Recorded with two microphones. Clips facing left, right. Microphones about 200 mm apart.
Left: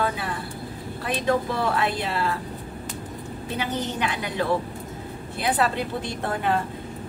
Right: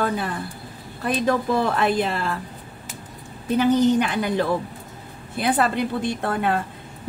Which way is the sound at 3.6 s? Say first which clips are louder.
Right 11 dB; 45° right (ahead or behind).